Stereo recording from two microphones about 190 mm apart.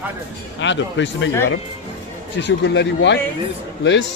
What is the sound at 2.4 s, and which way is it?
A man's voice, 65° left (ahead or behind).